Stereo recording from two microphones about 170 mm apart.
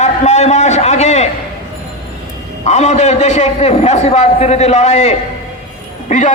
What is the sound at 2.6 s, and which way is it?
A man's voice, 45° left (ahead or behind).